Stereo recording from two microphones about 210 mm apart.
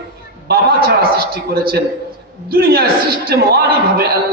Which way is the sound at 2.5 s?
45° right (ahead or behind).